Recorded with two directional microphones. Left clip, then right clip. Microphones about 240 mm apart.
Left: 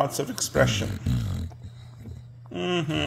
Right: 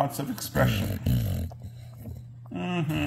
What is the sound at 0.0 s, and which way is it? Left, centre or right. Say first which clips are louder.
Speech: left 3 dB; left.